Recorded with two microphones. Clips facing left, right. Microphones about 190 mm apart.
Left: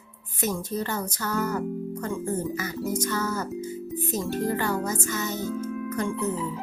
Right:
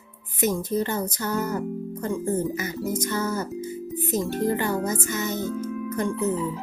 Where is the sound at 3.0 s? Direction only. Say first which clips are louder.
Right 1 dB; 20° right (ahead or behind).